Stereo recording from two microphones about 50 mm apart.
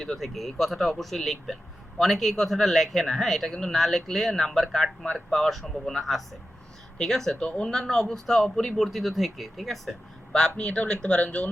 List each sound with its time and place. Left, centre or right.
0.0 s a man's voice: centre
7.3 s speech: left
7.7 s a man's voice: centre
10.6 s speech: left